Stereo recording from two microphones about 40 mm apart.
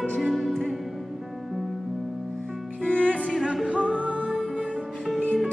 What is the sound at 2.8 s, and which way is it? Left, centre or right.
Music, left.